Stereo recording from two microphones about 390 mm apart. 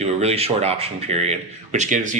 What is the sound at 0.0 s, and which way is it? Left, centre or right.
A man's voice, centre.